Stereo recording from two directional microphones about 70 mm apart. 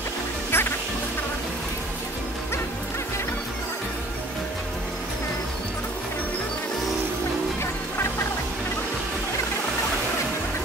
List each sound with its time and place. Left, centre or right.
0.5 s music: left